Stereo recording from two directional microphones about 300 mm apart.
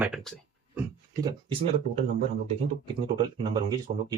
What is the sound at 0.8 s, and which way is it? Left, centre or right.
Speech, centre.